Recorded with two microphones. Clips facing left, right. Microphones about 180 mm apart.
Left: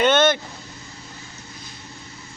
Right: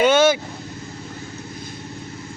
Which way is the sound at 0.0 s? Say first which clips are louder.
Right 2 dB; 10° right (ahead or behind).